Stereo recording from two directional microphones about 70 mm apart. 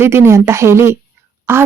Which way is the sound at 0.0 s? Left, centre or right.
Right.